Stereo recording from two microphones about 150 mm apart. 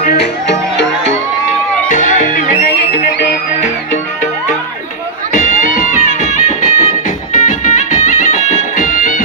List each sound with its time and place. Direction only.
0.0 s music: 90° left
1.9 s music: 55° left (ahead or behind); by 3.3 s 75° left (ahead or behind)
5.3 s music: 55° left (ahead or behind)